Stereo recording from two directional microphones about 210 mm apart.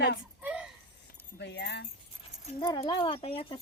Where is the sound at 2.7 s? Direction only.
20° left (ahead or behind).